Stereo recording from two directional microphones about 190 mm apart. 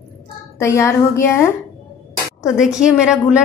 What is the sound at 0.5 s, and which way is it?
Speech, 15° left (ahead or behind).